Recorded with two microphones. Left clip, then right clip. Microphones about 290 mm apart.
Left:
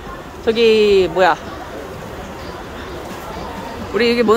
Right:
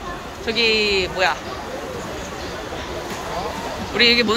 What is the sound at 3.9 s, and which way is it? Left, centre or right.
Speech, centre.